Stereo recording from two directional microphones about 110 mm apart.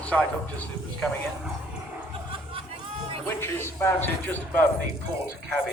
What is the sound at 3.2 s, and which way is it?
A man's voice, 20° left (ahead or behind).